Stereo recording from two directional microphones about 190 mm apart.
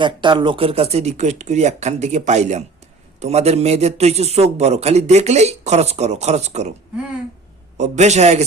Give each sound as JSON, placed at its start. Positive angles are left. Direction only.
{"t": 0.0, "sound": "a man's voice", "side_deg": -25}
{"t": 7.8, "sound": "a man's voice", "side_deg": -35}